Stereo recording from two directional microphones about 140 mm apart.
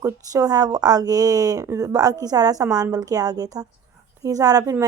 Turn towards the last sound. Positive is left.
turn(degrees=-25)  # may be behind; listen again after turning